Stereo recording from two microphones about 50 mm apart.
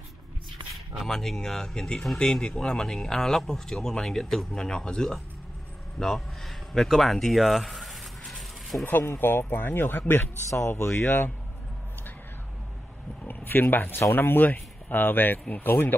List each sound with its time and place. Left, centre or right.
1.0 s speech: centre
8.4 s a sound: centre
8.8 s speech: left
10.7 s speech: left
13.3 s speech: left